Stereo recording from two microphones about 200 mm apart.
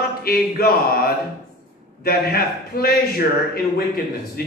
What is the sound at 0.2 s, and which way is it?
A man's voice, 50° left (ahead or behind).